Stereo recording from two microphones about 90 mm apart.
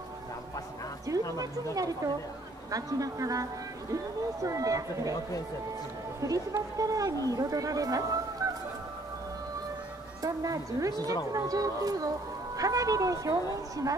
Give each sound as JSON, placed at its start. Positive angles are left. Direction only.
{"t": 1.1, "sound": "music", "side_deg": -40}
{"t": 2.7, "sound": "a woman's voice", "side_deg": -40}
{"t": 6.2, "sound": "a woman's voice", "side_deg": -40}
{"t": 10.2, "sound": "a woman's voice", "side_deg": -40}